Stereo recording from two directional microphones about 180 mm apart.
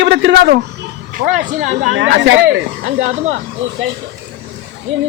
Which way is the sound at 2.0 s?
90° right.